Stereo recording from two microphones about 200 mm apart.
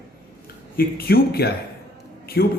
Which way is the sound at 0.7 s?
50° left (ahead or behind).